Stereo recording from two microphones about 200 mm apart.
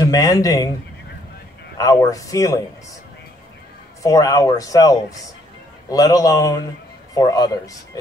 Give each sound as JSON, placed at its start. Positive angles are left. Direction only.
{"t": 0.0, "sound": "speech", "side_deg": 15}
{"t": 1.8, "sound": "speech", "side_deg": 15}
{"t": 4.0, "sound": "speech", "side_deg": 15}